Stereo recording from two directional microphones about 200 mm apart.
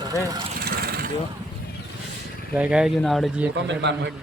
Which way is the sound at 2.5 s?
5° right (ahead or behind).